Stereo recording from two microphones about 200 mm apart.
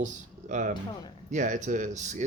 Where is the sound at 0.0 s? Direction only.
40° right (ahead or behind).